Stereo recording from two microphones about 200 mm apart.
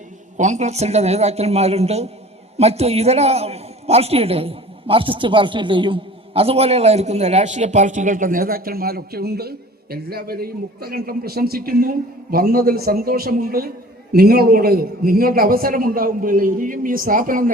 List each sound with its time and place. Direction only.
0.3 s a man's voice: 35° right (ahead or behind)